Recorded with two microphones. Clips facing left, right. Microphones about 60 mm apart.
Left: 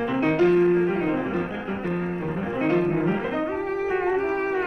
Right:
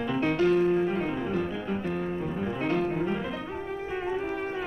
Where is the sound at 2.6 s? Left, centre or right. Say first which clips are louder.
Left 6 dB; left.